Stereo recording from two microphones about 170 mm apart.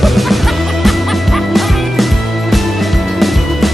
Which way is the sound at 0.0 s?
Centre (ahead or behind).